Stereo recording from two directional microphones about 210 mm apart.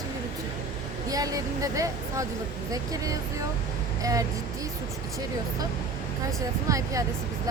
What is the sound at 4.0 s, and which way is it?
Speech, 15° right (ahead or behind).